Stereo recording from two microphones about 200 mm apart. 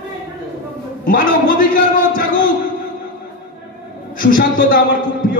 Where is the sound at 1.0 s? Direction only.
45° left (ahead or behind).